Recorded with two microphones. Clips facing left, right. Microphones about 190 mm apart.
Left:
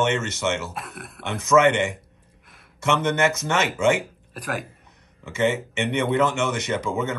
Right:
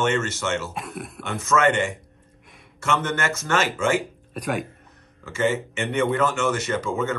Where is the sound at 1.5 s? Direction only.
20° left (ahead or behind).